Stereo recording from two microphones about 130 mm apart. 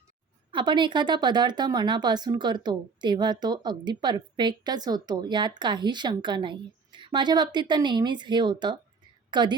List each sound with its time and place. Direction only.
0.5 s a woman's voice: 35° right (ahead or behind)